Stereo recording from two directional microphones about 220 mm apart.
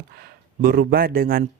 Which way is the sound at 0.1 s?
45° right (ahead or behind).